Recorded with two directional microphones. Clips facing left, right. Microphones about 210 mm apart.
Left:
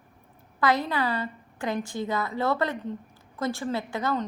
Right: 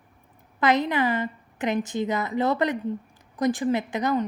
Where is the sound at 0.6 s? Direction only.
20° right (ahead or behind).